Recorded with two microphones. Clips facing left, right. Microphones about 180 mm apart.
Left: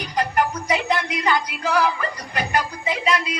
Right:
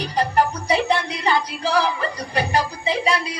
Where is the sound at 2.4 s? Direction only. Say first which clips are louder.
Right 2 dB; 30° right (ahead or behind).